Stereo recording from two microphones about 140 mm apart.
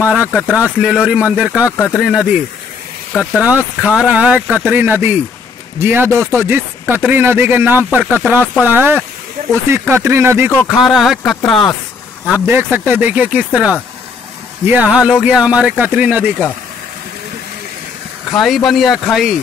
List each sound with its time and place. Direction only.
0.0 s speech: 5° right (ahead or behind)
10.7 s speech: centre (ahead or behind)
12.4 s speech: 15° right (ahead or behind)
14.7 s speech: 10° right (ahead or behind)
18.3 s speech: centre (ahead or behind)